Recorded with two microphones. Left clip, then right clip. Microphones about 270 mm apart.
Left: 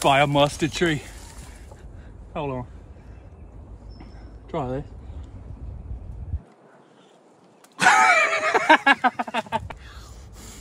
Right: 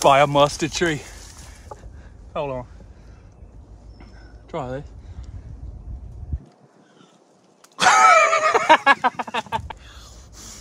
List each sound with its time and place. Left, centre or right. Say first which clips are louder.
0.1 s speech: right 3 dB; right
2.3 s speech: right 3 dB; centre
4.5 s speech: left 1 dB; centre
7.7 s a sound: right 3 dB; centre